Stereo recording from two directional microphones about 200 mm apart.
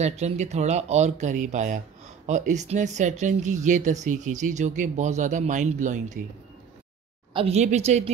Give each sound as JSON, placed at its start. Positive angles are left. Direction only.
{"t": 0.0, "sound": "speech", "side_deg": -35}
{"t": 7.3, "sound": "speech", "side_deg": -30}